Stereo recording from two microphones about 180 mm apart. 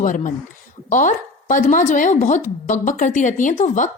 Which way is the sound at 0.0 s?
45° left (ahead or behind).